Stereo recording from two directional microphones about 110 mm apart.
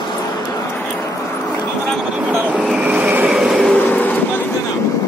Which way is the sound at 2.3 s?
15° right (ahead or behind).